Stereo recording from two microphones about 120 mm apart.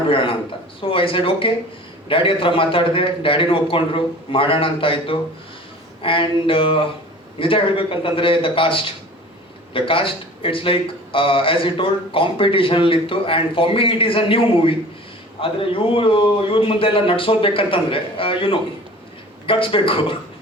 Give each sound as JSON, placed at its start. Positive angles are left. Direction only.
{"t": 0.1, "sound": "a man's voice", "side_deg": 50}